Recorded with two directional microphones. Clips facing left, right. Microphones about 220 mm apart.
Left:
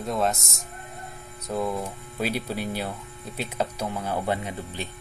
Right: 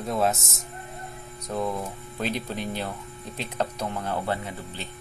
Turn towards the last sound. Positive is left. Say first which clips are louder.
# left 3 dB
turn(degrees=15)  # may be behind; listen again after turning